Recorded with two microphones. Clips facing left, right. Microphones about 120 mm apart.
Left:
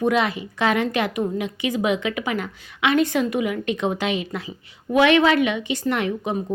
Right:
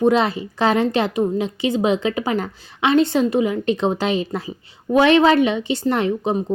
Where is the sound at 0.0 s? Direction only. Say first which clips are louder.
Right 4 dB; 30° right (ahead or behind).